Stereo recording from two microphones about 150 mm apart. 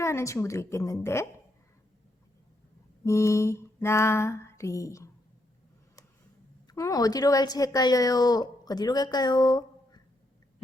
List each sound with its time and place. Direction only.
0.0 s a woman's voice: 20° left (ahead or behind)
3.0 s mantra: 20° left (ahead or behind)
6.7 s speech: 25° left (ahead or behind)